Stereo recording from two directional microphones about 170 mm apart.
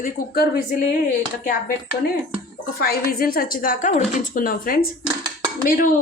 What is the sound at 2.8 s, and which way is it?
A woman's voice, 60° left (ahead or behind).